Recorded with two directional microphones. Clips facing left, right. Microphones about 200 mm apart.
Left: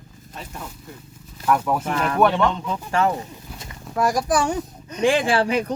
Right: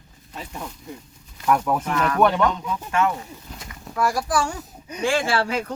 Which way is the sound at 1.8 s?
30° left (ahead or behind).